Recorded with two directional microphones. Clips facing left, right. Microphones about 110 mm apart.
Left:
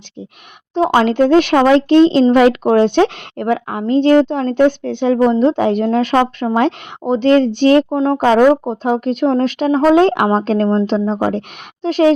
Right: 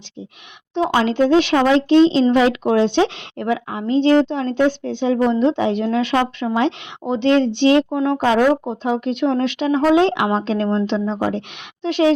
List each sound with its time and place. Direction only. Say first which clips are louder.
0.7 s speech: left 5 dB; 45° left (ahead or behind)
7.9 s speech: left 4 dB; 35° left (ahead or behind)